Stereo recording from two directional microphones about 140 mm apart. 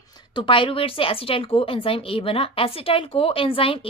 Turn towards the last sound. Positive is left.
turn(degrees=40)  # may be behind; listen again after turning